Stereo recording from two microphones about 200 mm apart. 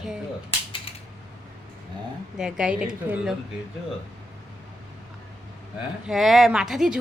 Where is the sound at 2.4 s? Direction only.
5° right (ahead or behind).